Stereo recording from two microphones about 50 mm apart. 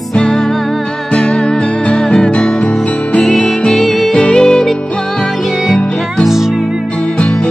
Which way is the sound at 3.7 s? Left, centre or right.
Centre.